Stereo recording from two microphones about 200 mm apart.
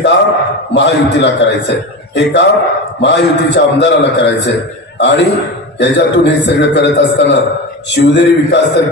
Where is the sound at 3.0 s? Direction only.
60° left (ahead or behind).